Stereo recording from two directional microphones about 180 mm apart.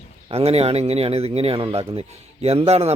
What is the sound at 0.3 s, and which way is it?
Speech, 35° right (ahead or behind).